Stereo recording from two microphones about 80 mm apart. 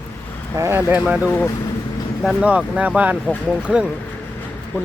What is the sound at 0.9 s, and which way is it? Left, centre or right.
Speech, centre.